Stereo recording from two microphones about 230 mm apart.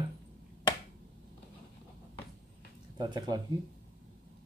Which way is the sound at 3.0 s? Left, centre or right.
Centre.